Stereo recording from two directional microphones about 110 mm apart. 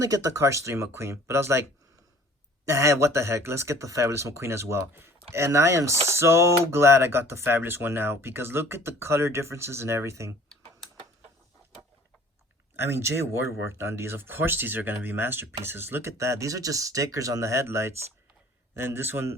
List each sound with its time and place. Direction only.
0.0 s speech: 30° right (ahead or behind)
2.6 s speech: 25° right (ahead or behind)
12.7 s speech: 20° right (ahead or behind)